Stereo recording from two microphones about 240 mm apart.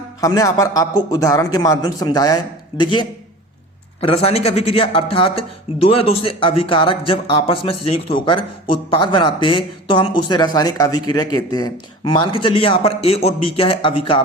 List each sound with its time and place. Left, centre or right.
0.2 s speech: centre